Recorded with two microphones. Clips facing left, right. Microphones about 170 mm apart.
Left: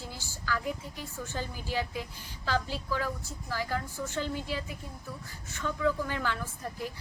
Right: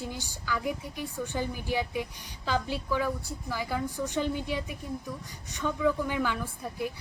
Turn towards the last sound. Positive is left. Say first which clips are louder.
# right 3 dB
turn(degrees=-15)  # may be behind; listen again after turning